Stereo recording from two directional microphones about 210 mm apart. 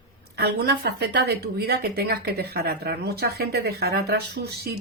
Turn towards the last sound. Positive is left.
turn(degrees=-50)  # may be behind; listen again after turning